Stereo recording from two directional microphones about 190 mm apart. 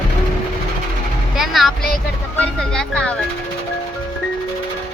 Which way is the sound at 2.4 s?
5° left (ahead or behind).